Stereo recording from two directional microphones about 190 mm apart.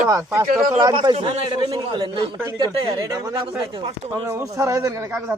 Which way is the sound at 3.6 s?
30° right (ahead or behind).